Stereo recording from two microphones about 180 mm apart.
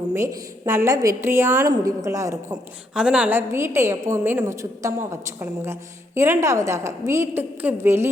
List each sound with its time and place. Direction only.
0.1 s a woman's voice: 15° right (ahead or behind)
2.9 s a woman's voice: 5° right (ahead or behind)